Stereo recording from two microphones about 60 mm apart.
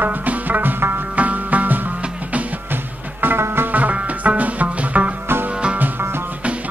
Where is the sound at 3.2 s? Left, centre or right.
Right; by 5.7 s centre.